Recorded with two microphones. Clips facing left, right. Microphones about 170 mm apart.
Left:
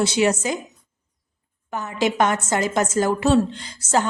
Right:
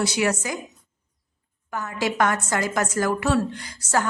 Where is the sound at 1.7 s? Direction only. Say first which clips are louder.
Left 3 dB; 20° left (ahead or behind).